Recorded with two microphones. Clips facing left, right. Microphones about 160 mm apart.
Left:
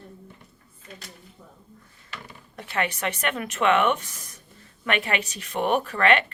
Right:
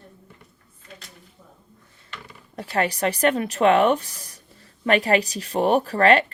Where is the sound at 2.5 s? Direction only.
35° right (ahead or behind).